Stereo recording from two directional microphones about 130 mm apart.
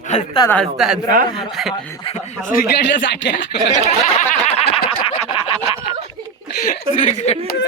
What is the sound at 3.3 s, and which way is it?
Speech, 70° left (ahead or behind).